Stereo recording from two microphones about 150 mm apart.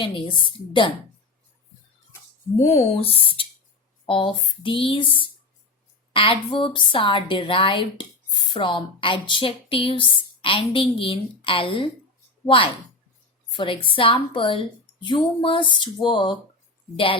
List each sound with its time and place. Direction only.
0.0 s speech: 35° left (ahead or behind)
2.6 s speech: 50° left (ahead or behind)
13.6 s speech: 35° left (ahead or behind)